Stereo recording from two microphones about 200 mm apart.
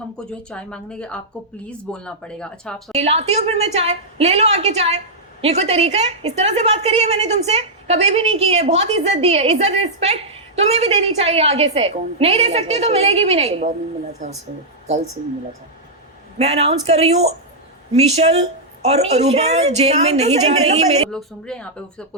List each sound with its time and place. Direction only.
0.3 s speech: 5° left (ahead or behind)
2.9 s a woman's voice: 30° right (ahead or behind)
16.4 s a woman's voice: 30° right (ahead or behind)
21.1 s speech: 5° left (ahead or behind)